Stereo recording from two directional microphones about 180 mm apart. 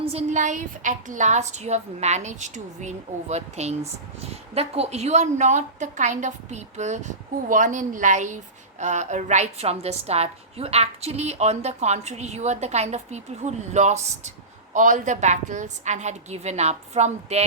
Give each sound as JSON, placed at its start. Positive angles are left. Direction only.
{"t": 0.0, "sound": "a woman's voice", "side_deg": -35}